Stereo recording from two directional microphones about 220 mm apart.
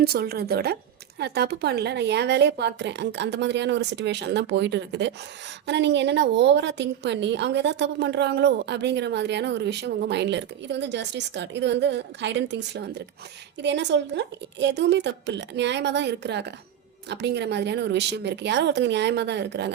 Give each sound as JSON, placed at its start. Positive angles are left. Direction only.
{"t": 0.0, "sound": "a woman's voice", "side_deg": -45}